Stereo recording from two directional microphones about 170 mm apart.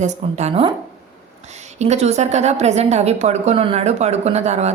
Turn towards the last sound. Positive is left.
turn(degrees=-40)  # may be behind; listen again after turning